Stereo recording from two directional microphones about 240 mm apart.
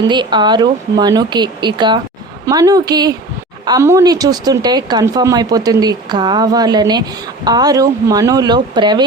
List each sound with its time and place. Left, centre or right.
0.1 s speech: centre